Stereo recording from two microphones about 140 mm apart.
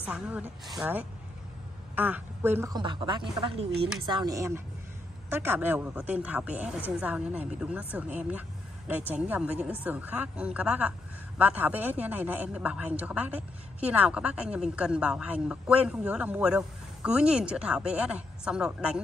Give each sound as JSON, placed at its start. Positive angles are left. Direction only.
{"t": 0.0, "sound": "speech", "side_deg": -10}
{"t": 2.0, "sound": "a woman's voice", "side_deg": -10}
{"t": 2.7, "sound": "speech", "side_deg": -35}